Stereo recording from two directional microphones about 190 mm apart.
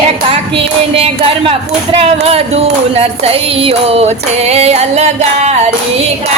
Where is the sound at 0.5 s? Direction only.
30° right (ahead or behind).